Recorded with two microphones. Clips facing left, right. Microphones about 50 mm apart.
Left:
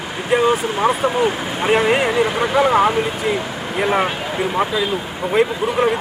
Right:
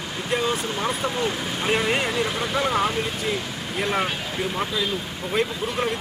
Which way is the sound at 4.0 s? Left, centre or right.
Left.